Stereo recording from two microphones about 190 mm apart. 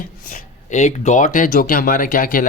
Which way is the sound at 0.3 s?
40° left (ahead or behind).